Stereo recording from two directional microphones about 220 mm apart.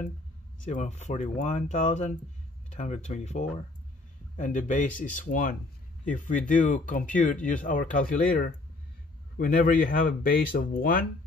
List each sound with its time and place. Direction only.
0.7 s speech: 30° left (ahead or behind)